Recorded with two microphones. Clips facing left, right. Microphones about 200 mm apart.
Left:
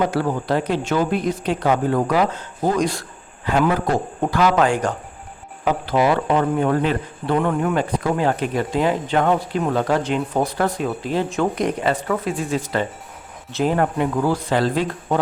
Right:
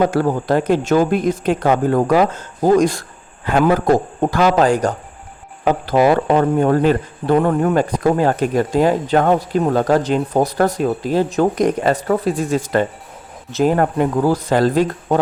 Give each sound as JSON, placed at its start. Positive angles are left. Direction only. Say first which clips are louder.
{"t": 0.0, "sound": "speech", "louder": "right 4 dB", "side_deg": -45}